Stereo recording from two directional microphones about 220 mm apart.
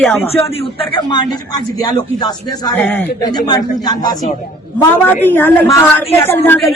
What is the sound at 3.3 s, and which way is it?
A man's voice, 20° left (ahead or behind).